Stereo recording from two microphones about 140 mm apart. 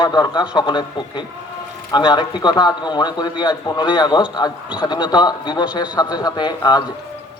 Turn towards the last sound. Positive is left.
turn(degrees=30)  # may be behind; listen again after turning